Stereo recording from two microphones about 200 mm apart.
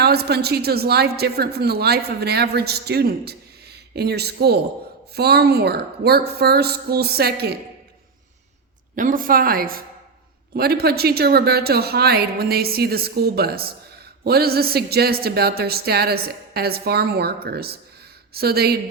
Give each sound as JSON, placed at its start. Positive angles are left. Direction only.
{"t": 0.0, "sound": "a woman's voice", "side_deg": -50}
{"t": 9.0, "sound": "a woman's voice", "side_deg": -45}